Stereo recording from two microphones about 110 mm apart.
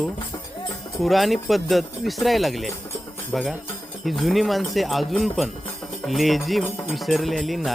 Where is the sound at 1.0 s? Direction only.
Centre (ahead or behind).